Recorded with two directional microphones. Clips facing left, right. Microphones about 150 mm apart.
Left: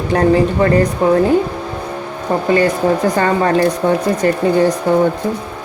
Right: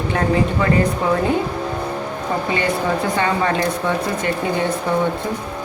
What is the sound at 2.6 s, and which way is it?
Speech, 40° left (ahead or behind).